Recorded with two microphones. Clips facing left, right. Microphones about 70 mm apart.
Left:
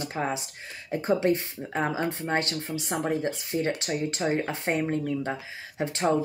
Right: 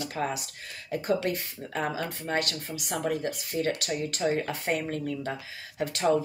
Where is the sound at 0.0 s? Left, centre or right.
Left.